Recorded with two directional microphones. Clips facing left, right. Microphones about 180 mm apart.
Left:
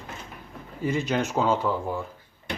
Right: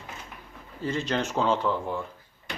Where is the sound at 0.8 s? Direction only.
10° left (ahead or behind).